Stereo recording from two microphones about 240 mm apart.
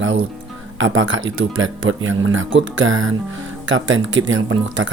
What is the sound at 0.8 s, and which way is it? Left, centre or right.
Speech, right.